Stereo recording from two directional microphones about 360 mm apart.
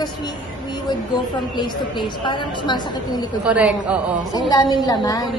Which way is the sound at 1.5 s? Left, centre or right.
Centre.